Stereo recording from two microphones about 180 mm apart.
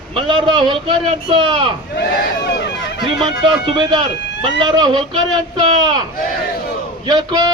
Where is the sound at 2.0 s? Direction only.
65° left (ahead or behind).